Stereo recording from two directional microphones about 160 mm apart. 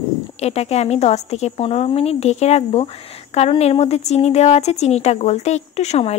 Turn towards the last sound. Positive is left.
turn(degrees=40)  # may be behind; listen again after turning